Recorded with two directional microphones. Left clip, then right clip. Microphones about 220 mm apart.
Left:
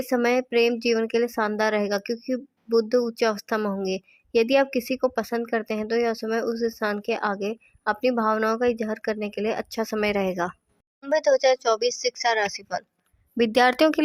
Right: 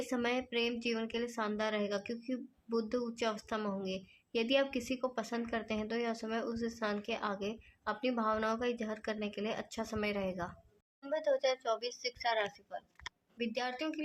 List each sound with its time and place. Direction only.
0.1 s speech: 40° left (ahead or behind)